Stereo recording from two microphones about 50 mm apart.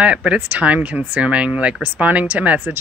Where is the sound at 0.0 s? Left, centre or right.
Right.